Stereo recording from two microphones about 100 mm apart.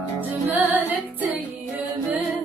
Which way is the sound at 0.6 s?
15° right (ahead or behind).